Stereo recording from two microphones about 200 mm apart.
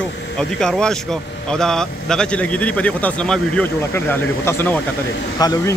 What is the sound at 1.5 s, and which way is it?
Speech, 5° left (ahead or behind).